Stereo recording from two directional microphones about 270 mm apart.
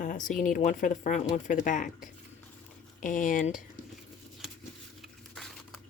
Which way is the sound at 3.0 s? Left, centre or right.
Left.